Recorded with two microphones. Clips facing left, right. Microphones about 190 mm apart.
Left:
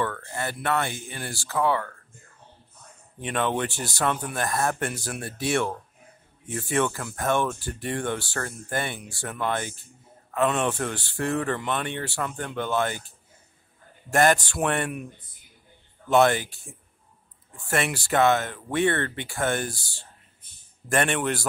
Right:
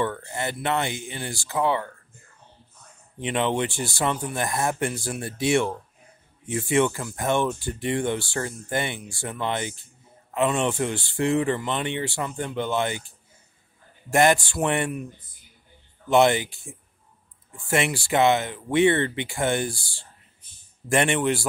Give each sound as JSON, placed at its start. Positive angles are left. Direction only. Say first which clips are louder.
{"t": 0.0, "sound": "speech", "louder": "right 2 dB", "side_deg": -20}
{"t": 3.2, "sound": "speech", "louder": "right 2 dB", "side_deg": -15}
{"t": 14.1, "sound": "speech", "louder": "right 1 dB", "side_deg": -15}
{"t": 16.1, "sound": "speech", "louder": "right 1 dB", "side_deg": -15}
{"t": 17.6, "sound": "speech", "louder": "right 2 dB", "side_deg": -15}